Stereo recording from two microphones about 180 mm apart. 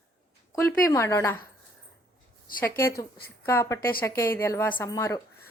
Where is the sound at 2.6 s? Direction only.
15° left (ahead or behind).